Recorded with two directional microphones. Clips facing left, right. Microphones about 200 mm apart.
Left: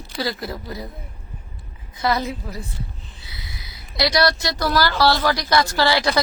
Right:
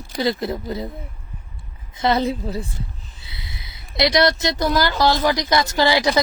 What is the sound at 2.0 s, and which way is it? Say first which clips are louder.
A woman's voice: right 3 dB; 25° right (ahead or behind).